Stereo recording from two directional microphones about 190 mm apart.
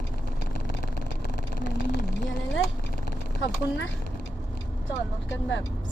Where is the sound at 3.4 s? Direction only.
80° left.